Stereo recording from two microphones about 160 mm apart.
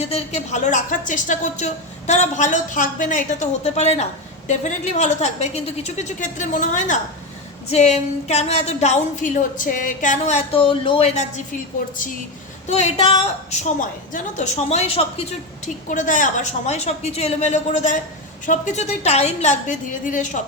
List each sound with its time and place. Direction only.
0.0 s a woman's voice: 40° left (ahead or behind)
12.6 s a woman's voice: 45° left (ahead or behind)